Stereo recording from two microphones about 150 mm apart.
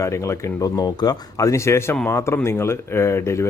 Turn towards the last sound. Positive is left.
turn(degrees=20)  # may be behind; listen again after turning